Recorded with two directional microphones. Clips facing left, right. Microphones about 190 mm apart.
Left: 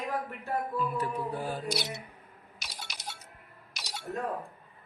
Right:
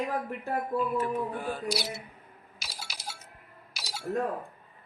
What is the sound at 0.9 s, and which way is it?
Music, 40° left (ahead or behind).